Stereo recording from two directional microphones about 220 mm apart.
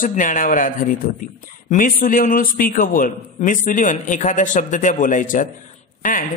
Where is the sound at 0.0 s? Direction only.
35° left (ahead or behind).